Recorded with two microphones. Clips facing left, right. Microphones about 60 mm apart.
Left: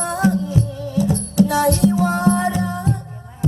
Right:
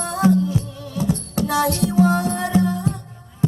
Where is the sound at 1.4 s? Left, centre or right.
Left.